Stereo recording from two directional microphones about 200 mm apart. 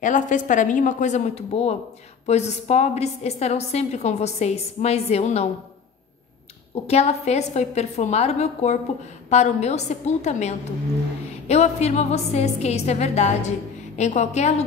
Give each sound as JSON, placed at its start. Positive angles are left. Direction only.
{"t": 0.0, "sound": "a woman's voice", "side_deg": 40}
{"t": 6.7, "sound": "a woman's voice", "side_deg": 30}